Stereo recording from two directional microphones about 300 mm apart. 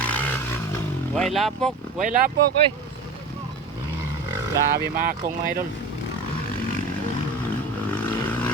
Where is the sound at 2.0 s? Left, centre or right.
Right.